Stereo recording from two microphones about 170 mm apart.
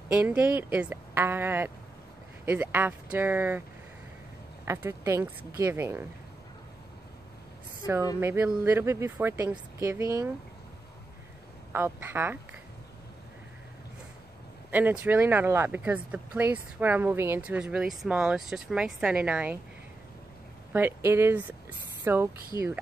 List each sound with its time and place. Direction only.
0.1 s speech: 10° right (ahead or behind)
4.6 s speech: 15° right (ahead or behind)
7.8 s speech: 20° left (ahead or behind)
8.2 s speech: 15° right (ahead or behind)
11.7 s speech: 10° right (ahead or behind)
14.7 s speech: 10° right (ahead or behind)
20.7 s speech: 15° right (ahead or behind)